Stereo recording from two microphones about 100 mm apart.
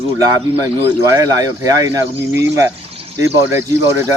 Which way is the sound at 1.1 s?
35° right (ahead or behind).